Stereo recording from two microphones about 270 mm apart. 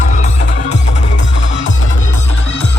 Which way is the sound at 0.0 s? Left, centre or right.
Left.